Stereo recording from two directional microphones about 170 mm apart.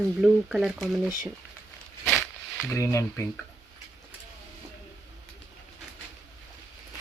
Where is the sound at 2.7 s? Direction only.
15° left (ahead or behind).